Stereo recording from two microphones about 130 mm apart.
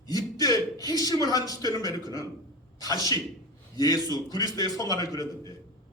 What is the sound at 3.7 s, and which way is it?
A man's voice, 30° left (ahead or behind).